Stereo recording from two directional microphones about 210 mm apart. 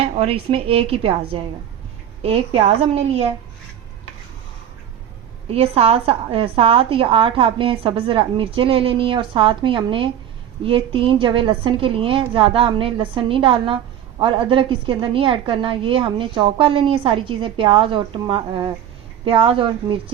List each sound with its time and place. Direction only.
0.0 s a woman's voice: 25° right (ahead or behind)
5.5 s a woman's voice: 30° right (ahead or behind)